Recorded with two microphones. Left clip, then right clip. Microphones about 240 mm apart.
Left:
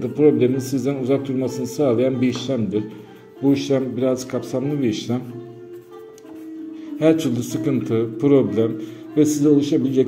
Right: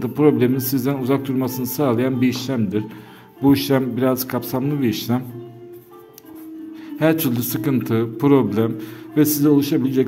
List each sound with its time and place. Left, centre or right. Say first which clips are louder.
0.0 s a man's voice: left 1 dB; right
7.0 s a man's voice: left 1 dB; right